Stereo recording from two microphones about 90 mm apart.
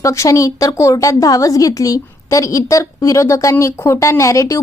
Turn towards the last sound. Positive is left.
turn(degrees=40)  # may be behind; listen again after turning